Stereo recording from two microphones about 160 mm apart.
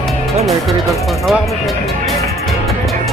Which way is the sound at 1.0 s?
Centre (ahead or behind).